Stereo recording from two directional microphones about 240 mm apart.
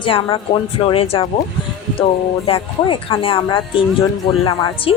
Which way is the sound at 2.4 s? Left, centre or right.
Left.